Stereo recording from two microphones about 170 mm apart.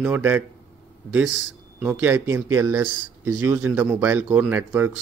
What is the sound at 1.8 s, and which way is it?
Speech, 10° right (ahead or behind).